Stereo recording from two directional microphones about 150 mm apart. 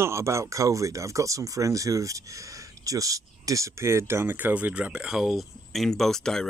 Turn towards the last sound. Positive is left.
turn(degrees=5)  # may be behind; listen again after turning